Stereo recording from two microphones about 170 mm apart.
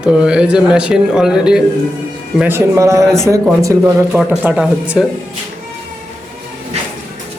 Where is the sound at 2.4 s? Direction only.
15° right (ahead or behind).